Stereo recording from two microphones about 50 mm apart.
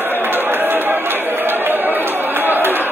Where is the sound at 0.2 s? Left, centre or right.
Right.